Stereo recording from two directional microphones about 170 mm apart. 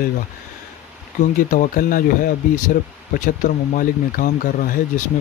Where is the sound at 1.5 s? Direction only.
50° left (ahead or behind).